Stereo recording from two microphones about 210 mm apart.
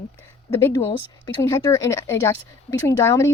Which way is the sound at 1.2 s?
15° left (ahead or behind).